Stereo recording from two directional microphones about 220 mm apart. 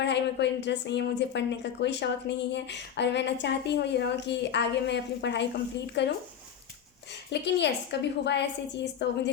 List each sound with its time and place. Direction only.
0.0 s a woman's voice: 50° left (ahead or behind)
7.3 s a woman's voice: 50° left (ahead or behind)